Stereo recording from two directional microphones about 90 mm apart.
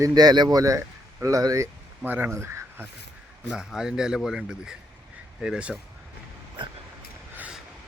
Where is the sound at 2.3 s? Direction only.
30° right (ahead or behind).